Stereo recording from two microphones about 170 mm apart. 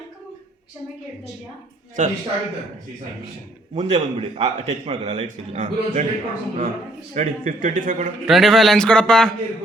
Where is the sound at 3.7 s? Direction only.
35° right (ahead or behind).